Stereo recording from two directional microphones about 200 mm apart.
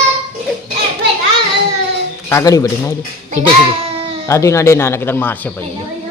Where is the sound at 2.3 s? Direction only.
15° left (ahead or behind).